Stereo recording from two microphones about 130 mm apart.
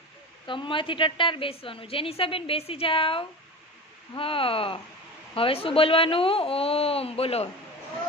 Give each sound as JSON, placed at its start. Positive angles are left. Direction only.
{"t": 0.5, "sound": "a woman's voice", "side_deg": 40}